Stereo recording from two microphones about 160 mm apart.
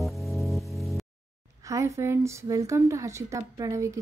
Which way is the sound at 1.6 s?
20° right (ahead or behind).